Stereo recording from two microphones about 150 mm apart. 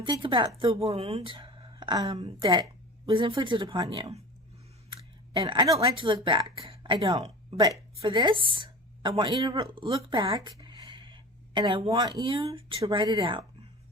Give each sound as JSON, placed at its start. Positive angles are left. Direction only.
{"t": 0.0, "sound": "speech", "side_deg": -35}
{"t": 5.4, "sound": "speech", "side_deg": -30}
{"t": 10.3, "sound": "a sound", "side_deg": -30}
{"t": 11.9, "sound": "speech", "side_deg": -25}